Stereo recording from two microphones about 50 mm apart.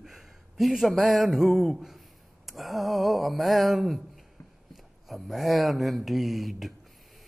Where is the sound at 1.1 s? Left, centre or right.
Centre.